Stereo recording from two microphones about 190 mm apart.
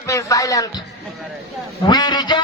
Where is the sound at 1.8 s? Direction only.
20° left (ahead or behind).